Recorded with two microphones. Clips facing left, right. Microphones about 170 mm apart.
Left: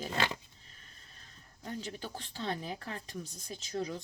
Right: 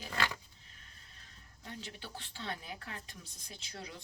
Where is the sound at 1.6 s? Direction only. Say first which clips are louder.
Left 7 dB; 45° left (ahead or behind).